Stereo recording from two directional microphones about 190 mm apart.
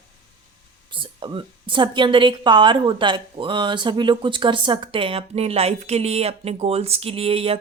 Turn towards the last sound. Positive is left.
turn(degrees=-30)  # may be behind; listen again after turning